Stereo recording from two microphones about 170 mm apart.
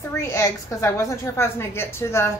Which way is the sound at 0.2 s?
15° left (ahead or behind).